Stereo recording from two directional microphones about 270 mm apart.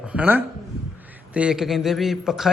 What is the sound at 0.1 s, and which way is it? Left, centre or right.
A man's voice, centre.